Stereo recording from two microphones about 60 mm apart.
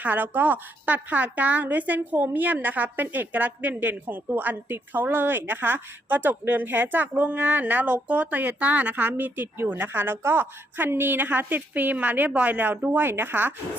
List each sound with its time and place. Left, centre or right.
0.0 s a woman's voice: right
12.5 s a woman's voice: right